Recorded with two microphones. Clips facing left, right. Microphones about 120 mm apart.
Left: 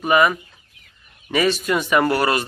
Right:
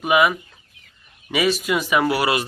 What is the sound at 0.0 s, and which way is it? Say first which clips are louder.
Speech: left 1 dB; 5° right (ahead or behind).